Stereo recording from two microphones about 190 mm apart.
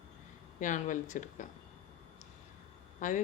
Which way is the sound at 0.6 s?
40° left (ahead or behind).